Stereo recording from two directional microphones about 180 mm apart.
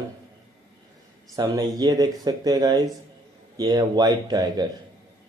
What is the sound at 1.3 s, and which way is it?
A man's voice, 20° right (ahead or behind).